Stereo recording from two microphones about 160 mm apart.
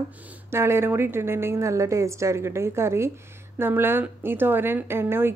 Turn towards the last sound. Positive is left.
turn(degrees=-15)  # may be behind; listen again after turning